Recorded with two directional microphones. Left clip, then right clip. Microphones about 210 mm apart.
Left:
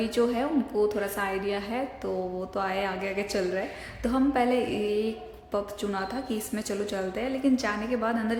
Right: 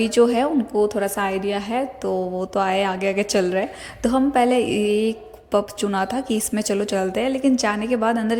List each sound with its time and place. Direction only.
0.0 s a woman's voice: 35° right (ahead or behind)